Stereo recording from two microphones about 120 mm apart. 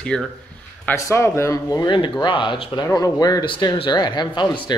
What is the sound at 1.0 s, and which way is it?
Speech, 25° left (ahead or behind).